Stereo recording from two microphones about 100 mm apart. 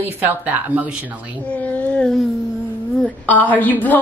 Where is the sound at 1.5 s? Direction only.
15° left (ahead or behind).